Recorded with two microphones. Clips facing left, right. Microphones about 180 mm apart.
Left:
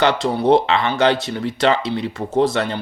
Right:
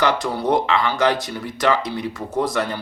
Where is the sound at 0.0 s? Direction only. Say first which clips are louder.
Left 3 dB; 25° left (ahead or behind).